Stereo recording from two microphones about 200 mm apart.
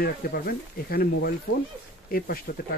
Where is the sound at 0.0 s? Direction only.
50° left (ahead or behind).